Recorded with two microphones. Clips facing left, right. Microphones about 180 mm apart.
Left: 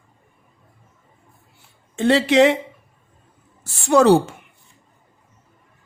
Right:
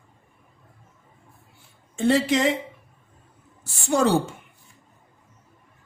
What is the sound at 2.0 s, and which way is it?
Speech, 75° left (ahead or behind).